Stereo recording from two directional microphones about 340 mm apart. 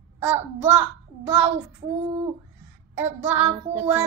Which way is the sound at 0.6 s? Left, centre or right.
Centre.